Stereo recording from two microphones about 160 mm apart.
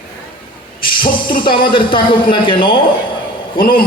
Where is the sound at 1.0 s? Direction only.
60° left (ahead or behind).